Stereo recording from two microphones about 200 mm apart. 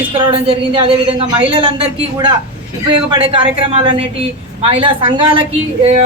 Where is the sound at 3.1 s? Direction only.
25° right (ahead or behind).